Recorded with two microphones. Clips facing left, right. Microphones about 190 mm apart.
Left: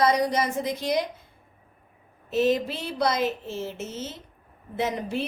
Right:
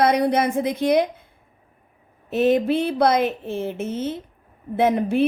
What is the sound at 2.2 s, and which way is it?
A woman's voice, 55° right (ahead or behind).